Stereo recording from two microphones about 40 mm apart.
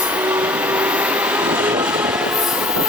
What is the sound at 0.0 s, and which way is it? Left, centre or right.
Train, right.